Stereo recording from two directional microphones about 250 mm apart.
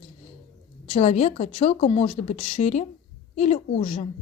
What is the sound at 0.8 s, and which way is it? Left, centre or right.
A woman's voice, left.